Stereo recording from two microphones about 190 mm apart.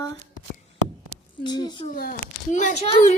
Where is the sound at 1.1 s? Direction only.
90° right.